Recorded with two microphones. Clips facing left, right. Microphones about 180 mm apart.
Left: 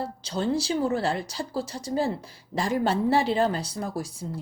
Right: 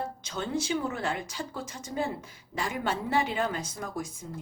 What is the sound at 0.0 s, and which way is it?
Speech, 35° left (ahead or behind).